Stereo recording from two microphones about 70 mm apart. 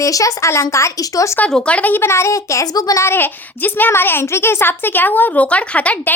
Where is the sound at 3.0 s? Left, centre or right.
Left; by 6.1 s centre.